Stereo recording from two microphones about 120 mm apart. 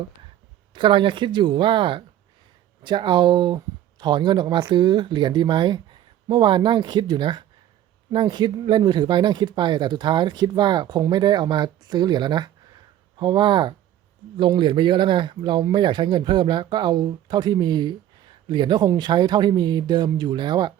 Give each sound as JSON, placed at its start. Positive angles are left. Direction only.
{"t": 0.7, "sound": "speech", "side_deg": -45}